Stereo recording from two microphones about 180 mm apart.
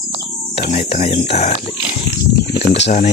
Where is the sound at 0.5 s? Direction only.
40° left (ahead or behind).